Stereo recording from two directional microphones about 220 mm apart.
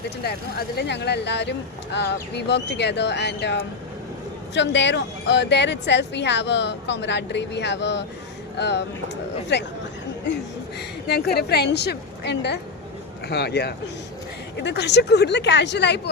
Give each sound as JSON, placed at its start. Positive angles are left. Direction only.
{"t": 0.8, "sound": "speech", "side_deg": 50}
{"t": 10.8, "sound": "speech", "side_deg": 45}